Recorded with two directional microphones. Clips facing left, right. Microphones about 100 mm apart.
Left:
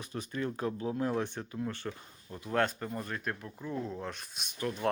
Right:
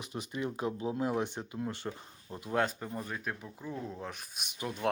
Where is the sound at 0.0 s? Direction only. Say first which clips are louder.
Left 1 dB; 15° right (ahead or behind).